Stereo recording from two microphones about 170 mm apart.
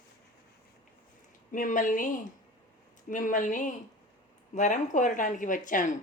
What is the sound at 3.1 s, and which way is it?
Speech, 50° left (ahead or behind).